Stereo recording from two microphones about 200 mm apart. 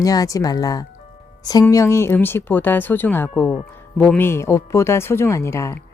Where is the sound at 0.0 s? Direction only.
20° left (ahead or behind).